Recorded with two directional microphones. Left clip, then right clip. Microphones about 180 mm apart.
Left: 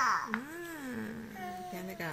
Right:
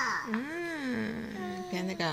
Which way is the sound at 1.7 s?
20° right (ahead or behind).